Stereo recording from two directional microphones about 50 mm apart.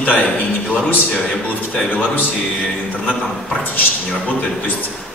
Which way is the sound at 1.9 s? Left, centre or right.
Left.